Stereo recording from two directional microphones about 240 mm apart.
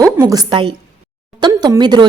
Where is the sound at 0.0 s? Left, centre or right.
Centre.